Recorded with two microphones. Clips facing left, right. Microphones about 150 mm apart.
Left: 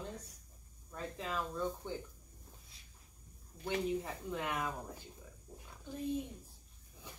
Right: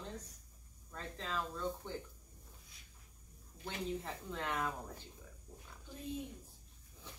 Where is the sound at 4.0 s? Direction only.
5° left (ahead or behind).